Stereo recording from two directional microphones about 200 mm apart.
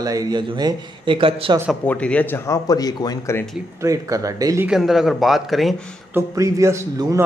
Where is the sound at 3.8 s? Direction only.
15° right (ahead or behind).